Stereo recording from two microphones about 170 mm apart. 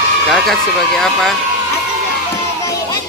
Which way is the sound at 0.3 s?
Centre (ahead or behind).